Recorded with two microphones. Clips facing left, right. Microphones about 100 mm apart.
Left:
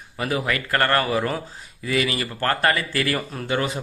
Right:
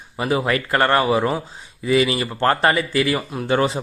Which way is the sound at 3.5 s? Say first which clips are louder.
Right 5 dB; 30° right (ahead or behind).